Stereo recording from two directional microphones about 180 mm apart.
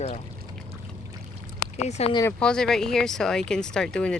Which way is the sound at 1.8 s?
35° left (ahead or behind).